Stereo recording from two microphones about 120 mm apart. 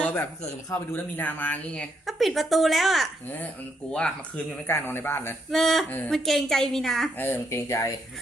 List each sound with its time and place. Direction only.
0.0 s a sound: 15° left (ahead or behind)
0.4 s speech: 20° left (ahead or behind)
2.0 s a woman's voice: centre (ahead or behind)
3.2 s speech: 15° left (ahead or behind)
4.6 s speech: 20° left (ahead or behind)
5.5 s a woman's voice: centre (ahead or behind)
7.2 s speech: 20° left (ahead or behind)